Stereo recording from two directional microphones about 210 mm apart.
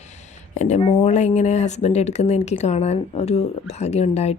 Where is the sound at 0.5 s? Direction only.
35° left (ahead or behind).